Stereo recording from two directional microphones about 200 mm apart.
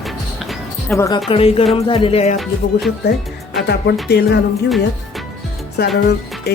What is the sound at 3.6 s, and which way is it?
Speech, 55° left (ahead or behind).